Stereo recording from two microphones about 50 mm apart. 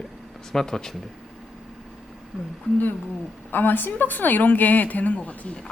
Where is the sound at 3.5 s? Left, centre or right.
Left.